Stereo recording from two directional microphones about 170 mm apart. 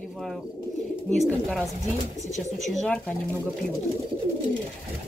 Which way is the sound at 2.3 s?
45° left (ahead or behind).